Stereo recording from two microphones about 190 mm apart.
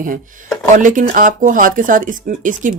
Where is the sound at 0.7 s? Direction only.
40° right (ahead or behind).